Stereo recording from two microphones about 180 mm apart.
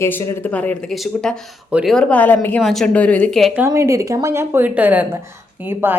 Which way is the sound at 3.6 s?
15° right (ahead or behind).